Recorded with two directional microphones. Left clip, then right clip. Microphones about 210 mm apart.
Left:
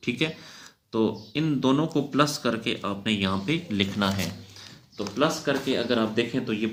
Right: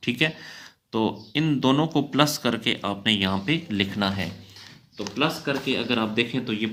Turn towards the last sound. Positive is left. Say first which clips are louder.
# right 1 dB
turn(degrees=-45)  # may be behind; listen again after turning